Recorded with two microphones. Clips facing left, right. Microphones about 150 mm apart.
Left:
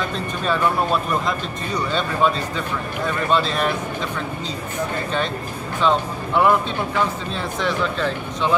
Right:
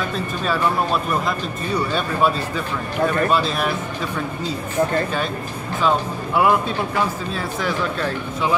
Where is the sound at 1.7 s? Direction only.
5° right (ahead or behind).